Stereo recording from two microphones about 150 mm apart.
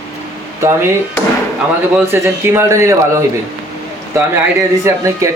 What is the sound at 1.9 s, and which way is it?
A man's voice, 15° right (ahead or behind).